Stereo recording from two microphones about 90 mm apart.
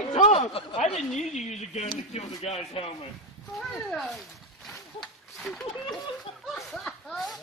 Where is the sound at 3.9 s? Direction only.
Centre (ahead or behind).